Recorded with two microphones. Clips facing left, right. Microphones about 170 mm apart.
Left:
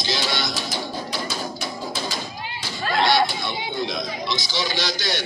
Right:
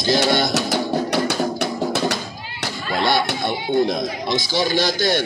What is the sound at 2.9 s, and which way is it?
Speech, 55° right (ahead or behind).